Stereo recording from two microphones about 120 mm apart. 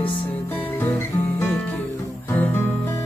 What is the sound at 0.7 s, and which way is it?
Music, 20° left (ahead or behind).